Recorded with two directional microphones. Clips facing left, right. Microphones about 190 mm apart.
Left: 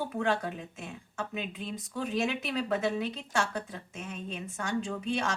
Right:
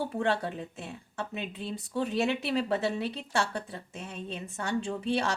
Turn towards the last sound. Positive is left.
turn(degrees=-30)  # may be behind; listen again after turning